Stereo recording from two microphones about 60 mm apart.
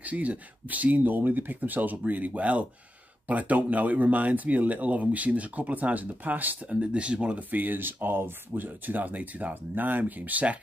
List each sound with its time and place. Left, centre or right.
0.0 s speech: right
7.5 s speech: right